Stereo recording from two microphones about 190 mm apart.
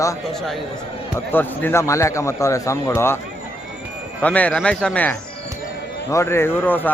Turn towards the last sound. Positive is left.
turn(degrees=10)  # may be behind; listen again after turning